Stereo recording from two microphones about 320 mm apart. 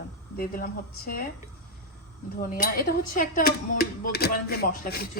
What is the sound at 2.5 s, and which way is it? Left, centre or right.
Speech, left.